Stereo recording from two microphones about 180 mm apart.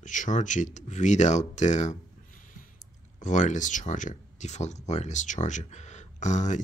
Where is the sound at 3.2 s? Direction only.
45° left (ahead or behind).